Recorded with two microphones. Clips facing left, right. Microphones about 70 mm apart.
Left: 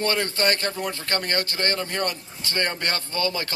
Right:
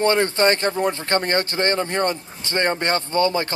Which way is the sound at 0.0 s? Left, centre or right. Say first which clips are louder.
Right 6 dB; right.